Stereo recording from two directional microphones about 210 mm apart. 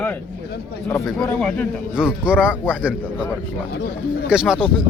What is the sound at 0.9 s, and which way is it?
Speech, centre (ahead or behind).